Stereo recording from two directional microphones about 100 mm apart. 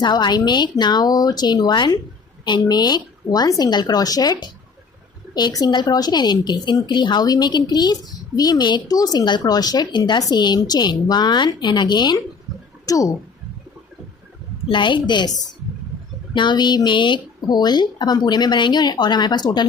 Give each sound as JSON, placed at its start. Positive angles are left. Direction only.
{"t": 0.0, "sound": "a woman's voice", "side_deg": 45}
{"t": 12.8, "sound": "a sound", "side_deg": 35}
{"t": 14.7, "sound": "a woman's voice", "side_deg": 55}